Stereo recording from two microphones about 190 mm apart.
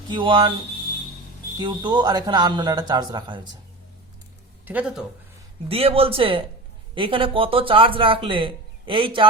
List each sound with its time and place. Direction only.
0.1 s speech: 25° right (ahead or behind)
1.5 s speech: 25° right (ahead or behind)
4.6 s speech: 5° right (ahead or behind)
5.6 s speech: 30° right (ahead or behind)